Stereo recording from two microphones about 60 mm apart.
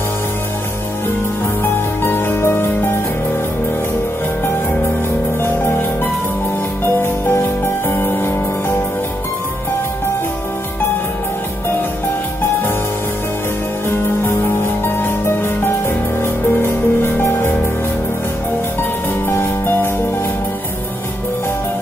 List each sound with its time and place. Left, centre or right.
1.6 s music: left
7.0 s music: left
13.8 s music: left
19.2 s music: left